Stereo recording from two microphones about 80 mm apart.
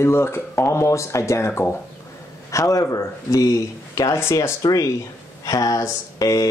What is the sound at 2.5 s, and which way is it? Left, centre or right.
Speech, left.